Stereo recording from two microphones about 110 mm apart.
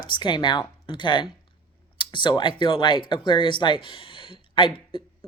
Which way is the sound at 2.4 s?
50° left (ahead or behind).